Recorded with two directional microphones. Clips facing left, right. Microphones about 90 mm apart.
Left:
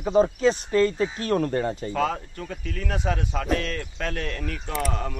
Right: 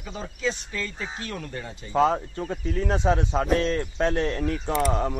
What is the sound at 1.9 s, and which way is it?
Speech, 25° right (ahead or behind).